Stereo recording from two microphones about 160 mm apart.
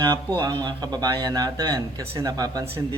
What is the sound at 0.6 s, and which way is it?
A man's voice, 25° right (ahead or behind).